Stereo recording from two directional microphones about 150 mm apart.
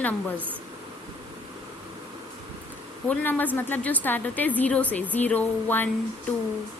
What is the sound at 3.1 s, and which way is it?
A woman's voice, 10° left (ahead or behind).